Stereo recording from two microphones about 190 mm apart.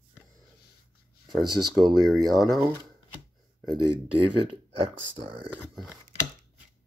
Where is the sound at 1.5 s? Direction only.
20° right (ahead or behind).